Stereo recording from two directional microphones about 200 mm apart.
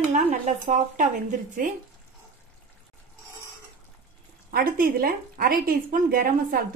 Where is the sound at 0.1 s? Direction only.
35° right (ahead or behind).